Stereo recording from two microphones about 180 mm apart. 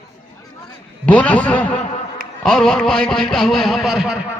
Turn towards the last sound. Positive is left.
turn(degrees=-5)  # may be behind; listen again after turning